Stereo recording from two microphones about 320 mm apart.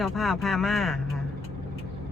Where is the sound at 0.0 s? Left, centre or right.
Centre.